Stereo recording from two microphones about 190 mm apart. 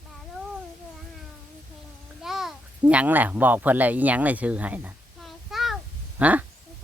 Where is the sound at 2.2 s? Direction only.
Centre (ahead or behind).